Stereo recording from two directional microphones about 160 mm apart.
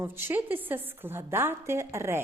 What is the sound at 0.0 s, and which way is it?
A woman's voice, 15° right (ahead or behind).